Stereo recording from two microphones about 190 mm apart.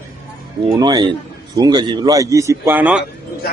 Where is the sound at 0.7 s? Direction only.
20° right (ahead or behind).